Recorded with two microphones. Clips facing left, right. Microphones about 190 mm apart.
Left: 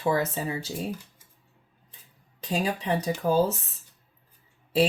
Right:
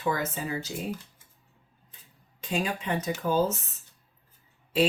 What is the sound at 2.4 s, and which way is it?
Speech, 35° left (ahead or behind).